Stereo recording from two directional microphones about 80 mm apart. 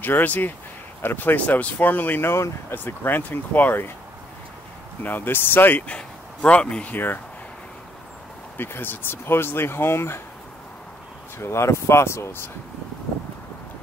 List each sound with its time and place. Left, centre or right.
0.0 s speech: left
5.0 s speech: left
8.5 s speech: left
11.3 s speech: left